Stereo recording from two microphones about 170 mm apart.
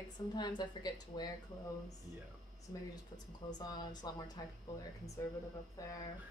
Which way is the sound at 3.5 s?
25° left (ahead or behind).